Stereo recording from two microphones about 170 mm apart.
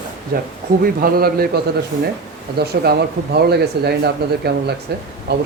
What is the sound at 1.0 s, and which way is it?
Speech, 60° right (ahead or behind).